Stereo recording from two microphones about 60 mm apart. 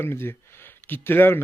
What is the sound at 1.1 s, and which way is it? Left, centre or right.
Speech, left.